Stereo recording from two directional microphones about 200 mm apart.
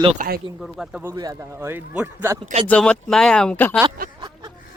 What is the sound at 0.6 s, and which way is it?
Speech, centre (ahead or behind).